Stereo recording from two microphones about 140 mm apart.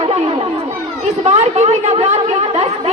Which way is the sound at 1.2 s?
55° right (ahead or behind).